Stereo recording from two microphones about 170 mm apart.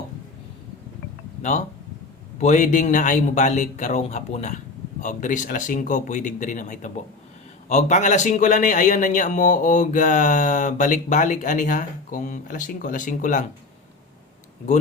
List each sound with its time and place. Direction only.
1.4 s a man's voice: 45° left (ahead or behind)